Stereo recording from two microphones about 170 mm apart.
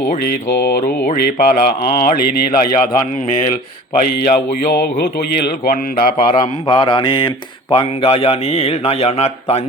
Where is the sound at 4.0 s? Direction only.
55° left (ahead or behind).